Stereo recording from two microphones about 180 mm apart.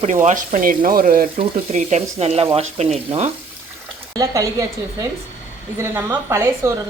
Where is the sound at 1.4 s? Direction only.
40° right (ahead or behind).